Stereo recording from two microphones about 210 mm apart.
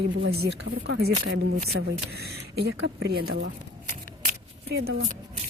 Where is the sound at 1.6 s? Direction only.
50° right (ahead or behind).